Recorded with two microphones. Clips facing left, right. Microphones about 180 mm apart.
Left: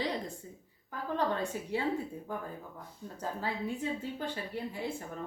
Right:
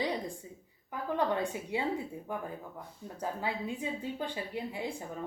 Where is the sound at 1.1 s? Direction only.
15° right (ahead or behind).